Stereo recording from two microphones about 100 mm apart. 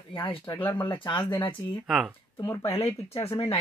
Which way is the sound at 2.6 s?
75° left (ahead or behind).